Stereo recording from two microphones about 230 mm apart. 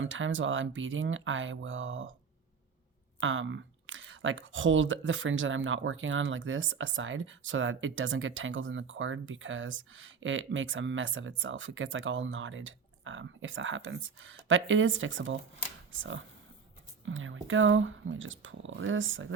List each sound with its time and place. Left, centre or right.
0.0 s speech: right
3.2 s speech: right